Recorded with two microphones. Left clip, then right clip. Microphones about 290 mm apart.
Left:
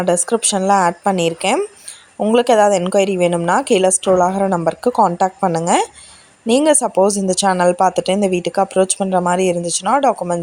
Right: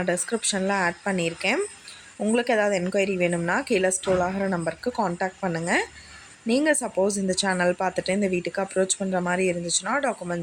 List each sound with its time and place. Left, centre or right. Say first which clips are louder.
0.0 s a woman's voice: left 10 dB; left